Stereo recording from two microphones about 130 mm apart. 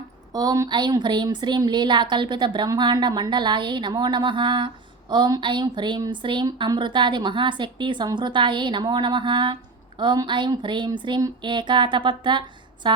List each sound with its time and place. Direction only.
0.3 s speech: 25° right (ahead or behind)